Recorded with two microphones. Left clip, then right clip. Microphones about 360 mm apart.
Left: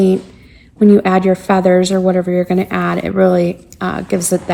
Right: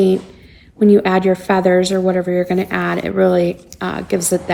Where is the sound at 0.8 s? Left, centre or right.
Centre.